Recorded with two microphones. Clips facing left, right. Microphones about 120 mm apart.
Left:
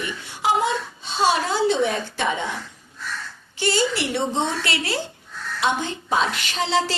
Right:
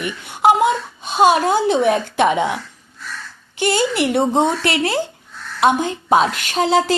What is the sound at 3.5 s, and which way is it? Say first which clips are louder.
A woman's voice: right 4 dB; 55° right (ahead or behind).